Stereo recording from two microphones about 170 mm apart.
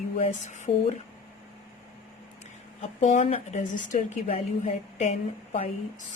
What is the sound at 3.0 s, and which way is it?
A woman's voice, 45° left (ahead or behind).